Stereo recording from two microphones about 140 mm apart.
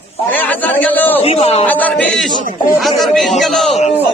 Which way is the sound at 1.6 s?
10° left (ahead or behind).